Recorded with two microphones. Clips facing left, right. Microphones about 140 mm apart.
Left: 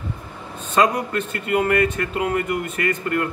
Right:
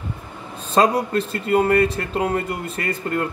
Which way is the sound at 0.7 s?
35° right (ahead or behind).